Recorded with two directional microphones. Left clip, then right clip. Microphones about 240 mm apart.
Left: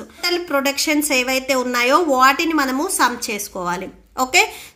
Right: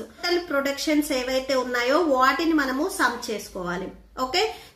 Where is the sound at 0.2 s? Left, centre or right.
Left.